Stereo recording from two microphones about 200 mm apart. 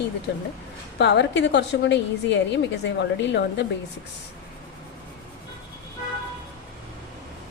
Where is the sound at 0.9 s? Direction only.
60° left (ahead or behind).